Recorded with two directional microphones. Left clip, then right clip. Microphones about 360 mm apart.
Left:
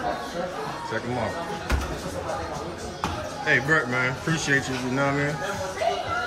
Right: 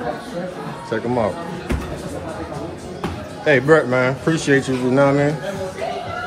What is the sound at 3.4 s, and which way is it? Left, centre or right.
Speech, centre.